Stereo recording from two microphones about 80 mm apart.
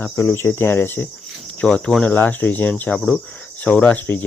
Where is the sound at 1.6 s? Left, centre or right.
Centre.